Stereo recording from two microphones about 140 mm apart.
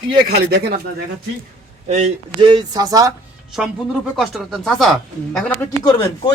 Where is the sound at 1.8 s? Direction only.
50° right (ahead or behind).